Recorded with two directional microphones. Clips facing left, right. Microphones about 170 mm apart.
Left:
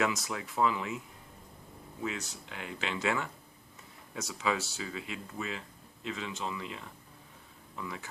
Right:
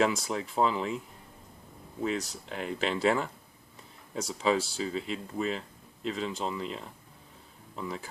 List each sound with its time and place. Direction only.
0.0 s speech: 30° right (ahead or behind)
2.0 s speech: 35° right (ahead or behind)